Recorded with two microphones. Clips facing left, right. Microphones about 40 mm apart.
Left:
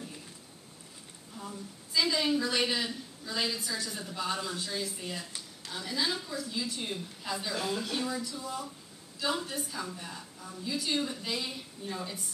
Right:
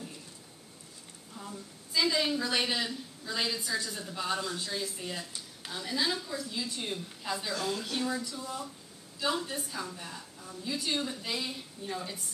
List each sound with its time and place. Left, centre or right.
1.4 s a sound: centre
2.0 s a woman's voice: centre
7.5 s speech: centre
7.8 s a woman's voice: centre